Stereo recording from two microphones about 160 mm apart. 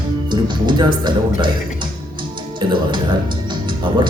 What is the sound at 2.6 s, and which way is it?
Speech, 30° right (ahead or behind).